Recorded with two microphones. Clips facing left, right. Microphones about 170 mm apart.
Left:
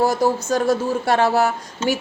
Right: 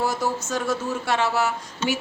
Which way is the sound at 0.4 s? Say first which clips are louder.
Left 7 dB; 35° left (ahead or behind).